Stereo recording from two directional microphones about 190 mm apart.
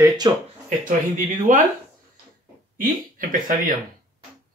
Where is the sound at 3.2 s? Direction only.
45° right (ahead or behind).